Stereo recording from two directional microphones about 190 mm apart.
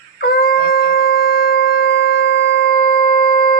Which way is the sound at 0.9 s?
55° left (ahead or behind).